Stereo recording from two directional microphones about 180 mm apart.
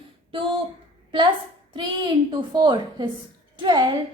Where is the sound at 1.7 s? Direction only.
25° right (ahead or behind).